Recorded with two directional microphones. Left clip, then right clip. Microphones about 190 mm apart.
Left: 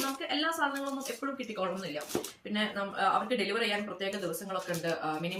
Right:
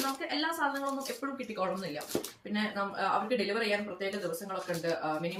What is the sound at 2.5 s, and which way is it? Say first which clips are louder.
Speech: left 1 dB; 15° left (ahead or behind).